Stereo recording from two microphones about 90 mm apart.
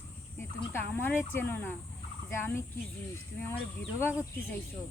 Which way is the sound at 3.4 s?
15° left (ahead or behind).